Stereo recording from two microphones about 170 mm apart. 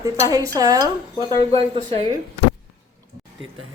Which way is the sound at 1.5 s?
35° right (ahead or behind).